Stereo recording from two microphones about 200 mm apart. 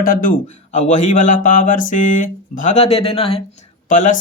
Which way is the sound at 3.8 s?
40° left (ahead or behind).